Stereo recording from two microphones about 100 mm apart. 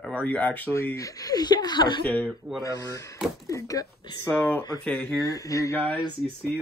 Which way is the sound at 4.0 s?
50° left (ahead or behind).